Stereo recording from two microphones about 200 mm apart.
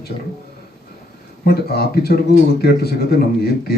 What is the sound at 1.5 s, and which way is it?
Speech, 50° left (ahead or behind).